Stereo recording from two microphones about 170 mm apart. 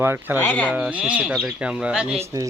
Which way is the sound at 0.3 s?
10° left (ahead or behind).